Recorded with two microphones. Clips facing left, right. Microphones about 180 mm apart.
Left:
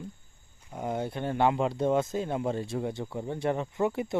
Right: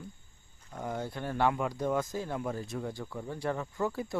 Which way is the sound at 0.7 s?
20° left (ahead or behind).